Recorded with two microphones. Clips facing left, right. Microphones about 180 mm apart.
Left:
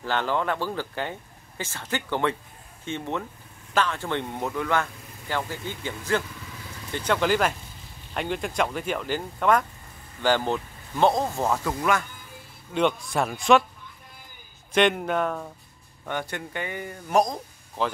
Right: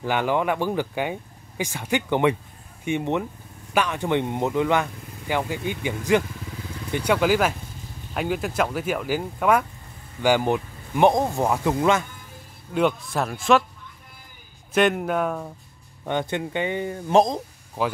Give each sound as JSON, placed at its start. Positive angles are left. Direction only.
{"t": 0.0, "sound": "speech", "side_deg": -15}
{"t": 12.7, "sound": "speech", "side_deg": 0}
{"t": 14.7, "sound": "speech", "side_deg": -5}
{"t": 16.1, "sound": "speech", "side_deg": -20}